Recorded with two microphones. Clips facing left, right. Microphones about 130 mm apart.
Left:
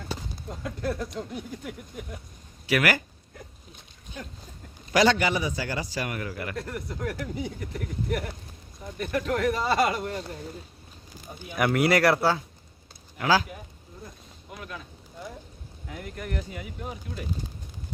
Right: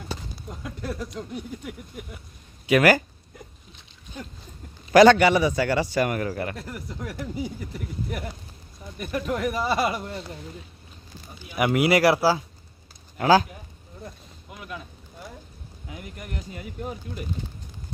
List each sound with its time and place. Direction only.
0.6 s speech: 5° right (ahead or behind)
2.6 s speech: 25° right (ahead or behind)
4.9 s a man's voice: 55° right (ahead or behind); by 6.6 s 35° right (ahead or behind)
6.6 s speech: 10° right (ahead or behind)
11.5 s speech: 10° right (ahead or behind)
13.1 s speech: 40° right (ahead or behind)
15.9 s speech: 20° right (ahead or behind)